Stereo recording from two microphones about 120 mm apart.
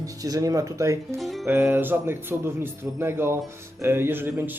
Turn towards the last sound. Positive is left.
turn(degrees=-15)  # may be behind; listen again after turning